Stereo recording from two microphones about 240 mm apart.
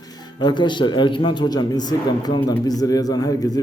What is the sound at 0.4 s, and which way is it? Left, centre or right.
A man's voice, centre.